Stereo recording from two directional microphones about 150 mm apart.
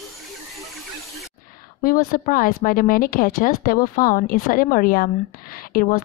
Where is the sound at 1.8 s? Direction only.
80° left.